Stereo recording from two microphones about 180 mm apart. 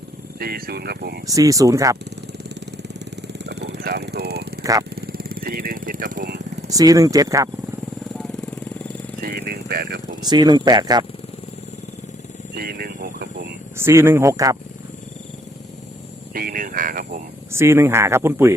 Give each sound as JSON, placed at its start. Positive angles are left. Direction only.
{"t": 0.3, "sound": "speech", "side_deg": -60}
{"t": 1.3, "sound": "speech", "side_deg": -20}
{"t": 3.4, "sound": "a sound", "side_deg": -70}
{"t": 4.6, "sound": "speech", "side_deg": -20}
{"t": 4.9, "sound": "vehicle", "side_deg": -55}
{"t": 6.7, "sound": "speech", "side_deg": -20}
{"t": 9.2, "sound": "a sound", "side_deg": -60}
{"t": 10.2, "sound": "speech", "side_deg": -25}
{"t": 12.5, "sound": "a sound", "side_deg": -60}
{"t": 13.7, "sound": "speech", "side_deg": -15}
{"t": 16.3, "sound": "speech", "side_deg": -55}
{"t": 17.5, "sound": "speech", "side_deg": -15}